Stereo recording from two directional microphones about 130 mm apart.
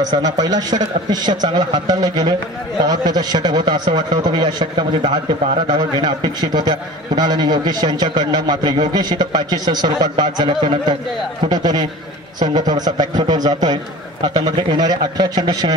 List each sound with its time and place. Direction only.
0.0 s a man's voice: 30° right (ahead or behind)